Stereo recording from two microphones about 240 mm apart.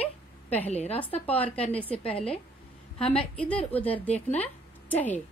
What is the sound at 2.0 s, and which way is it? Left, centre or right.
Speech, left.